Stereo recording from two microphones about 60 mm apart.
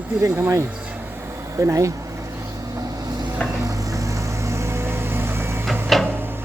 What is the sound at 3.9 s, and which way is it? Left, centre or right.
Vehicle, right.